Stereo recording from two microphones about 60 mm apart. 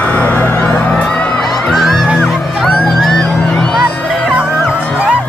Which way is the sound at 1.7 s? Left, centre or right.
Centre.